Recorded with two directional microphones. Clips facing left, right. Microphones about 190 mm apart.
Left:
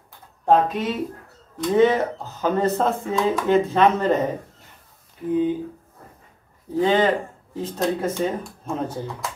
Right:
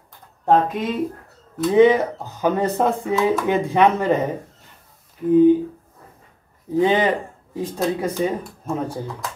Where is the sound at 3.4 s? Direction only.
15° right (ahead or behind).